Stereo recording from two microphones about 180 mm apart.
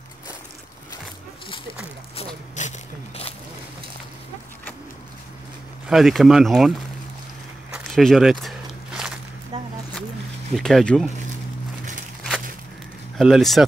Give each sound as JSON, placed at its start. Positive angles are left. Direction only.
{"t": 2.6, "sound": "a sound", "side_deg": 40}
{"t": 5.9, "sound": "speech", "side_deg": 0}
{"t": 7.7, "sound": "walk", "side_deg": 0}
{"t": 9.5, "sound": "a sound", "side_deg": -25}
{"t": 10.5, "sound": "speech", "side_deg": 5}
{"t": 13.2, "sound": "speech", "side_deg": 0}